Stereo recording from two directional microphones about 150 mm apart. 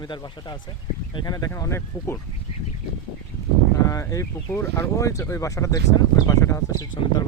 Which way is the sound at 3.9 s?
20° left (ahead or behind).